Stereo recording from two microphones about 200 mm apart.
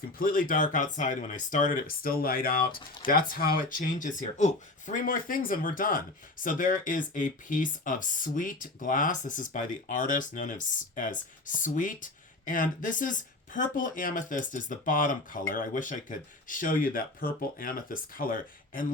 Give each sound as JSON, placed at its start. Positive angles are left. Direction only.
{"t": 0.2, "sound": "speech", "side_deg": 45}